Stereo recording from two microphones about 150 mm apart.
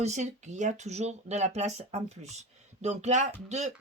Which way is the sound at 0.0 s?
50° right (ahead or behind).